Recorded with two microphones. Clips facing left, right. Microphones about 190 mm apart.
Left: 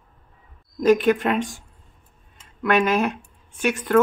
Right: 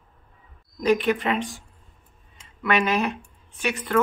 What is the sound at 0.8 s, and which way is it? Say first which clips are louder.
Speech: left 4 dB; 45° left (ahead or behind).